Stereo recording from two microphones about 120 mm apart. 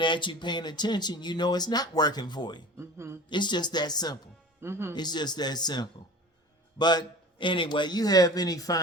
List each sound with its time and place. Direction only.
0.0 s speech: 40° left (ahead or behind)
2.7 s a sound: 20° right (ahead or behind)
3.2 s speech: 40° left (ahead or behind)
4.6 s speech: 20° right (ahead or behind)
4.9 s speech: 35° left (ahead or behind)